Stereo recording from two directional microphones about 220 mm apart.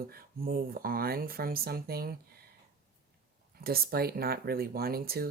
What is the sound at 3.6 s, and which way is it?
Speech, 45° right (ahead or behind).